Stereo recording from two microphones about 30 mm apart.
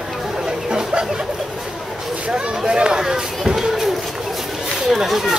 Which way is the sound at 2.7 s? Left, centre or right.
Right.